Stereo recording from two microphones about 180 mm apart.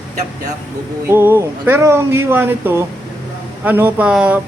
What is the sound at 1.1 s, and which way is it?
Speech, 15° right (ahead or behind).